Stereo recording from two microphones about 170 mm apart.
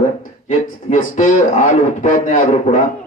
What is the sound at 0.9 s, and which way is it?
A man's voice, 45° left (ahead or behind).